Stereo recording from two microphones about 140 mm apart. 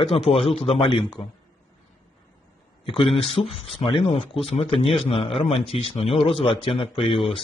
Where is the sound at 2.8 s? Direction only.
40° left (ahead or behind).